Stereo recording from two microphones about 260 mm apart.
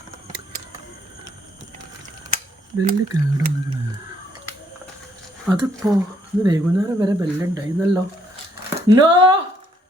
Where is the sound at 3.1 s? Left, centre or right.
Centre.